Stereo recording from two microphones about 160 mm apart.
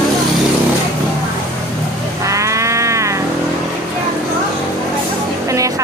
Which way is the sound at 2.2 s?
20° right (ahead or behind).